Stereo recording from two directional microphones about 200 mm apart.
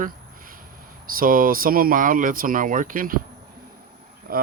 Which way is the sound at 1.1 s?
45° right (ahead or behind).